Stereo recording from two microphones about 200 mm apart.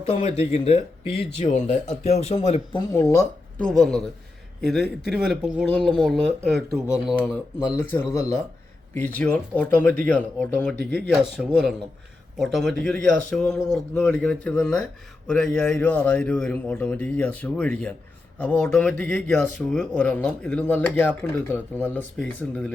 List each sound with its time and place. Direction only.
0.0 s speech: 30° left (ahead or behind)
2.9 s a man's voice: 15° left (ahead or behind)
3.6 s speech: centre (ahead or behind)
7.8 s a man's voice: 10° left (ahead or behind)